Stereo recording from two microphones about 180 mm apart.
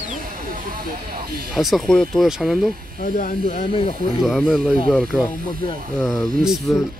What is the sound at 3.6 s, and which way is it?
Speech, 30° left (ahead or behind).